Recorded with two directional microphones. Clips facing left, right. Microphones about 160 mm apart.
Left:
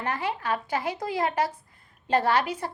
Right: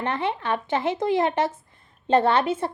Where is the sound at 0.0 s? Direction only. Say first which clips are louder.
Right 3 dB; 25° right (ahead or behind).